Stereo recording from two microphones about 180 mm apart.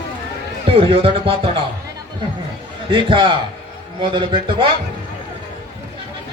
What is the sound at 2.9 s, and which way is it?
A man's voice, 30° right (ahead or behind).